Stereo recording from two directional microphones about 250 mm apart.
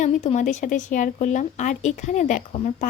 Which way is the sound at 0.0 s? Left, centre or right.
Left.